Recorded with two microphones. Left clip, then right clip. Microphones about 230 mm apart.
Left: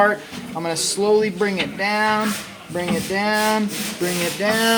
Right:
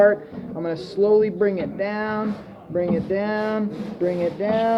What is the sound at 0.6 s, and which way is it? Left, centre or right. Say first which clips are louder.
Speech: even; left.